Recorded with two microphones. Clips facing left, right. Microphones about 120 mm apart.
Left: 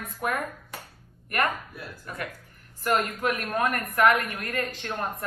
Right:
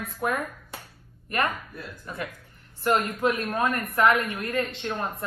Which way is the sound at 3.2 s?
30° right (ahead or behind).